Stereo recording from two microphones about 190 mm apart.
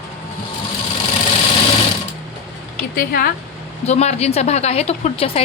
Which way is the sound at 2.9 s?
50° left (ahead or behind).